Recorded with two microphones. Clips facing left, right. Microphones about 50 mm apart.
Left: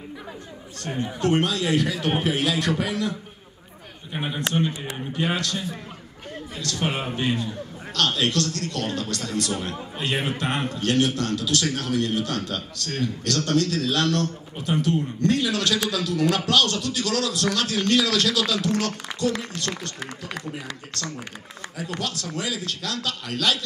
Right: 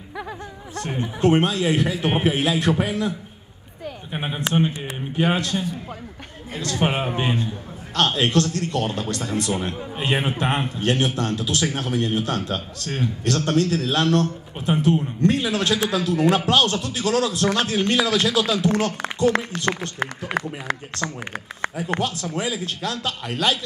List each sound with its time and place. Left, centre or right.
0.7 s a man's voice: right
20.9 s a man's voice: right